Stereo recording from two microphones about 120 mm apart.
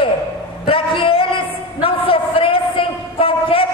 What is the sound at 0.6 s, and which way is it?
Speech, 50° left (ahead or behind).